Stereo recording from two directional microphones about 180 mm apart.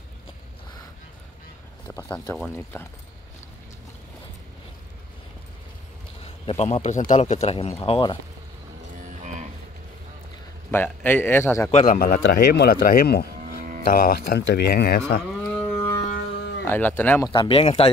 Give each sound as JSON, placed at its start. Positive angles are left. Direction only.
{"t": 1.9, "sound": "a man's voice", "side_deg": 15}
{"t": 6.2, "sound": "speech", "side_deg": 35}
{"t": 9.0, "sound": "cattle", "side_deg": -40}
{"t": 10.7, "sound": "a man's voice", "side_deg": 10}
{"t": 11.7, "sound": "speech", "side_deg": 45}
{"t": 15.5, "sound": "music", "side_deg": 10}
{"t": 16.3, "sound": "music", "side_deg": 70}
{"t": 16.6, "sound": "a man's voice", "side_deg": 10}
{"t": 17.3, "sound": "speech", "side_deg": 30}